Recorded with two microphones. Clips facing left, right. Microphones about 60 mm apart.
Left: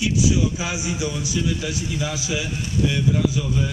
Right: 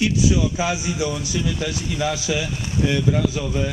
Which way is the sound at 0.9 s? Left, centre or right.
Right.